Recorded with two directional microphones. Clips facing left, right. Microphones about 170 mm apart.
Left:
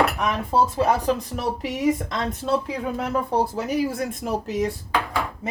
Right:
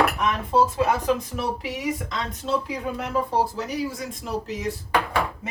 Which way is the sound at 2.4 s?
45° left (ahead or behind).